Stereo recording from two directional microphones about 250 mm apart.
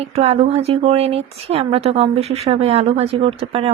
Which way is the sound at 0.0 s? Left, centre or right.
Right.